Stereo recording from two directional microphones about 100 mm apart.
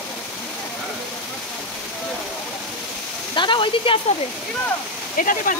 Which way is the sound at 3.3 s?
55° left (ahead or behind).